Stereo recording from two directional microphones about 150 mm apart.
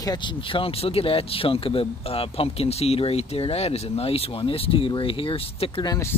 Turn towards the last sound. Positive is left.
turn(degrees=20)  # may be behind; listen again after turning